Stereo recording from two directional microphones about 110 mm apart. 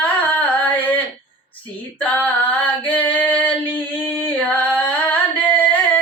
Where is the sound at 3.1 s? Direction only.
15° left (ahead or behind).